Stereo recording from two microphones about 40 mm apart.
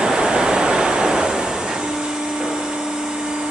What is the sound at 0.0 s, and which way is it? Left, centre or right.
Waves, centre.